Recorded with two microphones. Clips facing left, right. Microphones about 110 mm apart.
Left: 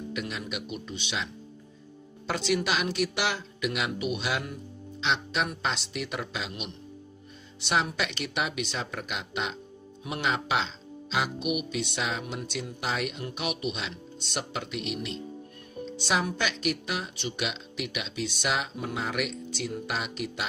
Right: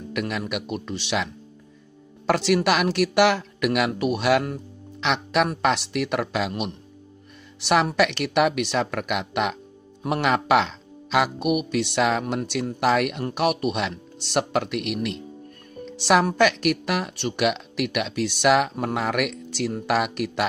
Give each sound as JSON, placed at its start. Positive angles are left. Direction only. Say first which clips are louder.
{"t": 0.1, "sound": "speech", "louder": "right 10 dB", "side_deg": -60}